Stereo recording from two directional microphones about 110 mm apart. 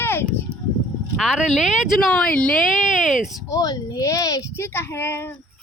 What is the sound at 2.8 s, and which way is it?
Speech, 5° right (ahead or behind).